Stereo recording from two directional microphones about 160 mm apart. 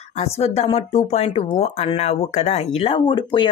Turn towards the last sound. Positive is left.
turn(degrees=30)  # may be behind; listen again after turning